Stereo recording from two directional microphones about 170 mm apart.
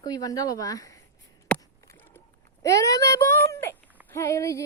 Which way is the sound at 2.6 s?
20° left (ahead or behind).